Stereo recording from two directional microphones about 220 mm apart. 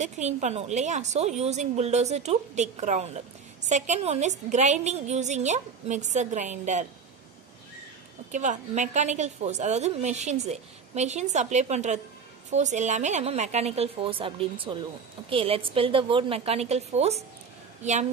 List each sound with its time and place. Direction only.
0.0 s a woman's voice: 30° right (ahead or behind)
8.3 s a woman's voice: 35° right (ahead or behind)